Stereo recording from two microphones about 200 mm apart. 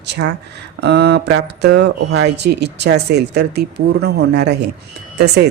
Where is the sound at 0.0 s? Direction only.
60° right (ahead or behind).